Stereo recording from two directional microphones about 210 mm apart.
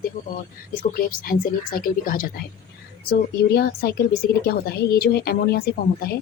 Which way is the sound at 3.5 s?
45° left (ahead or behind).